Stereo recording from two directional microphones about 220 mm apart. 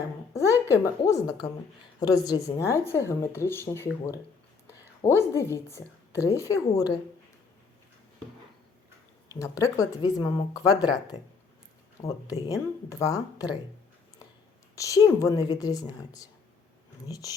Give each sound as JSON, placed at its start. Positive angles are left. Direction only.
{"t": 0.7, "sound": "speech", "side_deg": 15}
{"t": 9.4, "sound": "speech", "side_deg": 15}
{"t": 12.0, "sound": "speech", "side_deg": 15}
{"t": 14.8, "sound": "speech", "side_deg": 15}